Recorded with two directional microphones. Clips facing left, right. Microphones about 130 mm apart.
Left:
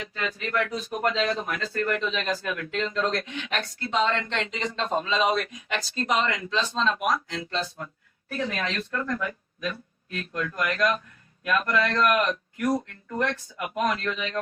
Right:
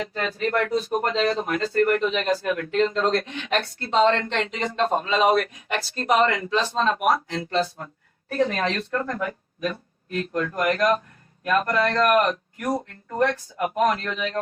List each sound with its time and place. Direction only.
0.0 s speech: 45° right (ahead or behind)
4.0 s speech: 55° right (ahead or behind)
8.3 s speech: 45° right (ahead or behind)
12.6 s speech: 30° right (ahead or behind)
13.1 s speech: 40° right (ahead or behind)